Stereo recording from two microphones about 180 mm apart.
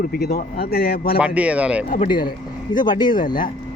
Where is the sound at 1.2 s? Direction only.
5° right (ahead or behind).